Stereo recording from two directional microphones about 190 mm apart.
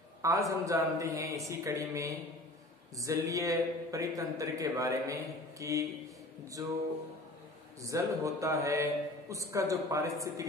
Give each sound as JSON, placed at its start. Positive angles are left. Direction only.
{"t": 0.2, "sound": "a man's voice", "side_deg": -15}
{"t": 7.8, "sound": "a man's voice", "side_deg": -15}